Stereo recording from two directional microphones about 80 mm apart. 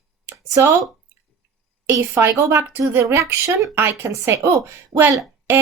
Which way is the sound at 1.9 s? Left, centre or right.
Right.